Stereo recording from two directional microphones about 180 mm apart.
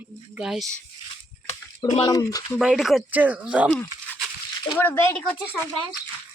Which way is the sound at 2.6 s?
Centre (ahead or behind).